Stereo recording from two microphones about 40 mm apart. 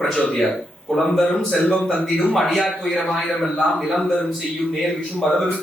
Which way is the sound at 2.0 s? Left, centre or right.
Left.